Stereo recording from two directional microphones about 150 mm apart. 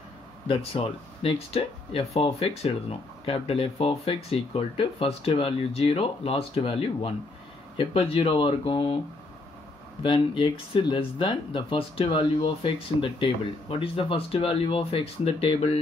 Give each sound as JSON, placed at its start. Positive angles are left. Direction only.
{"t": 0.5, "sound": "speech", "side_deg": 35}
{"t": 10.0, "sound": "speech", "side_deg": 35}